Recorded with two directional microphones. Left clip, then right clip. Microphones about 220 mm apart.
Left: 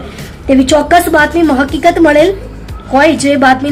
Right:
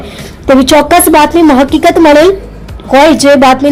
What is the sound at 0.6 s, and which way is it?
A woman's voice, 25° right (ahead or behind).